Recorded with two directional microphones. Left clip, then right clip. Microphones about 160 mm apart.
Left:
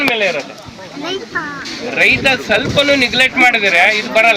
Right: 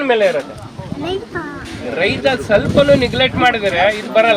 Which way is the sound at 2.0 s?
15° right (ahead or behind).